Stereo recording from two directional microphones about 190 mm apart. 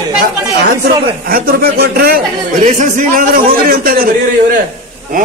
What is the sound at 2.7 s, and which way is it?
A man's voice, 40° right (ahead or behind).